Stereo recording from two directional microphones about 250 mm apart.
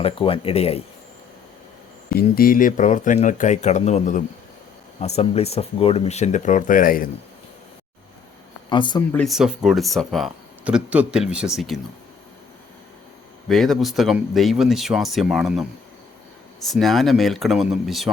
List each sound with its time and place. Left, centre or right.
0.0 s speech: left
2.1 s speech: left
8.7 s speech: centre
9.1 s speech: centre
13.5 s speech: centre
16.6 s speech: centre